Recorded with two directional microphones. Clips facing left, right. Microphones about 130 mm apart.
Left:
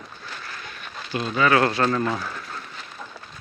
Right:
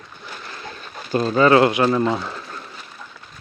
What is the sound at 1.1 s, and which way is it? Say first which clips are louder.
Speech: right 6 dB; 40° right (ahead or behind).